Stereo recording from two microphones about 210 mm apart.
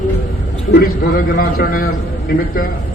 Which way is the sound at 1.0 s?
45° left (ahead or behind).